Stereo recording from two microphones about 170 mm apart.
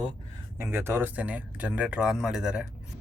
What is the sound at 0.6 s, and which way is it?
Speech, 15° right (ahead or behind).